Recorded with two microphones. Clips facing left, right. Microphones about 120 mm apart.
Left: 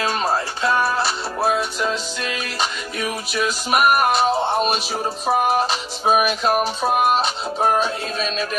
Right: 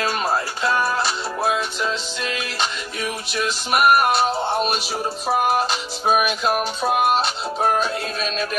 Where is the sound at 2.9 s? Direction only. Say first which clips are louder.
Left 3 dB; 45° left (ahead or behind).